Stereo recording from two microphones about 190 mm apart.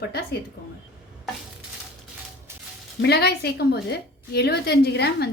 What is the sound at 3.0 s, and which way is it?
A woman's voice, 60° left (ahead or behind).